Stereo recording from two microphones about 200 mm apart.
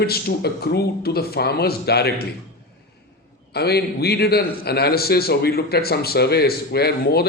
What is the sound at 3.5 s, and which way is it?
A man's voice, 55° left (ahead or behind).